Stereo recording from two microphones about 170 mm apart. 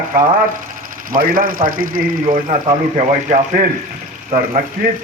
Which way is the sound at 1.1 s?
55° right (ahead or behind).